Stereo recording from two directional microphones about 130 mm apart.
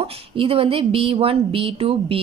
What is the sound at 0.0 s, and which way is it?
A woman's voice, 45° right (ahead or behind).